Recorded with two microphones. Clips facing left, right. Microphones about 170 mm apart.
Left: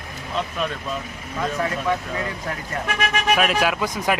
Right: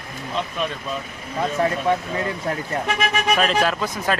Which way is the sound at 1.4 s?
30° right (ahead or behind).